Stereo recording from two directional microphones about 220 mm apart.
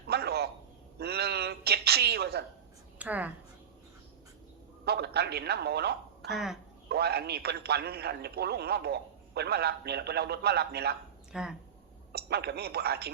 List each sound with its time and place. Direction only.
0.1 s a sound: 45° right (ahead or behind)
3.0 s a woman's voice: 5° right (ahead or behind)
4.9 s speech: 45° right (ahead or behind)
6.3 s speech: centre (ahead or behind)
6.8 s a man's voice: 45° right (ahead or behind)
11.3 s speech: 5° right (ahead or behind)
12.1 s a man's voice: 45° right (ahead or behind)